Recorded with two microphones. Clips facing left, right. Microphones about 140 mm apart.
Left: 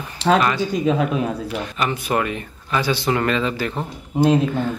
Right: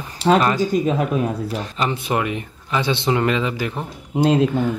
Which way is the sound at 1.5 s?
30° right (ahead or behind).